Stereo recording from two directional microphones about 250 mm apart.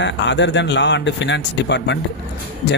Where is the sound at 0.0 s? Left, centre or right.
Left.